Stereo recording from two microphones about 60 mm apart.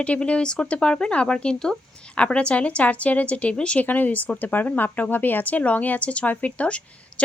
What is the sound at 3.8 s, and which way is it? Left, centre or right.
Speech, left.